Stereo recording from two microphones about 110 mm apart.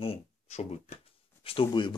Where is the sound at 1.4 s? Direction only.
55° left (ahead or behind).